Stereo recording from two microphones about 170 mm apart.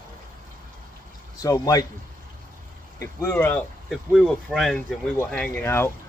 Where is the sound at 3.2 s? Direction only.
10° left (ahead or behind).